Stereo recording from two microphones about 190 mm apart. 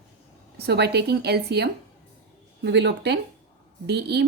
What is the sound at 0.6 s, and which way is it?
Speech, 60° right (ahead or behind).